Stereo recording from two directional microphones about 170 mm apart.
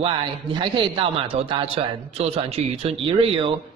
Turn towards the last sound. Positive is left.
turn(degrees=-30)  # may be behind; listen again after turning